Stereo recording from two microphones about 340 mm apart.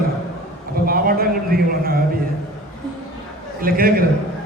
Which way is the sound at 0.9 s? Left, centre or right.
Right.